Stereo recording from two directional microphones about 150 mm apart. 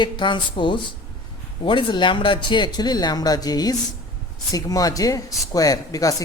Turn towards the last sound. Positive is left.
turn(degrees=25)  # may be behind; listen again after turning